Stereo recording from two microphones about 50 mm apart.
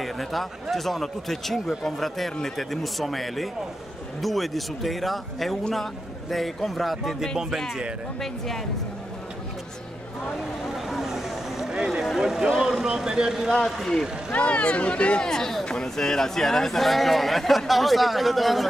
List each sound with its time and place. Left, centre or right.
0.0 s speech: centre
10.6 s speech: centre
14.3 s speech: left
15.2 s speech: centre